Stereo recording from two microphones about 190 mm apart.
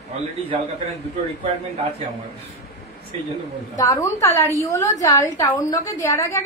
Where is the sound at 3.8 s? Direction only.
20° left (ahead or behind).